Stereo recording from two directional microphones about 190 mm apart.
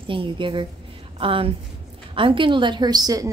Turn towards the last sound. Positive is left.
turn(degrees=-20)  # may be behind; listen again after turning